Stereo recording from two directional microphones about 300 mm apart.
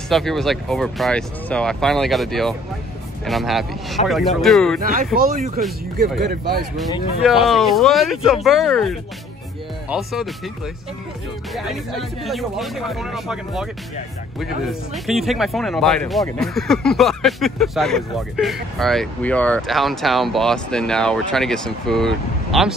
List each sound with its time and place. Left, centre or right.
0.1 s speech: centre
4.7 s speech: right
7.2 s speech: centre
11.5 s speech: centre
14.4 s speech: centre